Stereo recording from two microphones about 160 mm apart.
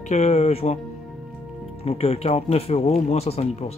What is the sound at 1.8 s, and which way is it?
Speech, 35° left (ahead or behind).